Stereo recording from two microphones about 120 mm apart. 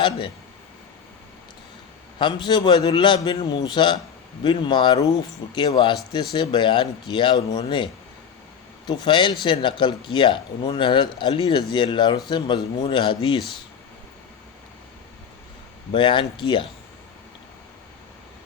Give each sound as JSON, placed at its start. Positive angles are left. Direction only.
{"t": 2.1, "sound": "speech", "side_deg": 40}
{"t": 8.9, "sound": "speech", "side_deg": 40}
{"t": 15.9, "sound": "speech", "side_deg": 40}